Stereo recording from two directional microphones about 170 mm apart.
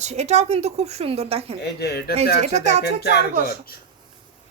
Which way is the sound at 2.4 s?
40° right (ahead or behind).